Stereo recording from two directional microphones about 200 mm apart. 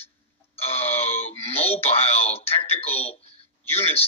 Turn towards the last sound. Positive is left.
turn(degrees=30)  # may be behind; listen again after turning